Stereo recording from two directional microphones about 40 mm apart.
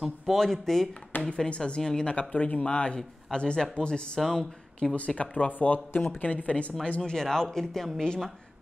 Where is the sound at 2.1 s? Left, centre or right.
Left.